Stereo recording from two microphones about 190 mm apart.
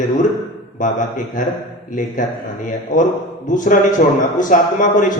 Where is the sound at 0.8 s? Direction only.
40° left (ahead or behind).